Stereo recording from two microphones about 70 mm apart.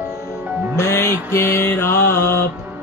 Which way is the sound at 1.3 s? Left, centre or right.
Left.